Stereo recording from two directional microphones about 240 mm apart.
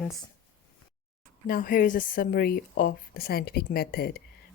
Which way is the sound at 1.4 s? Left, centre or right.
Left.